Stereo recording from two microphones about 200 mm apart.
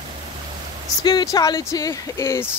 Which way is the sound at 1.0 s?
20° left (ahead or behind).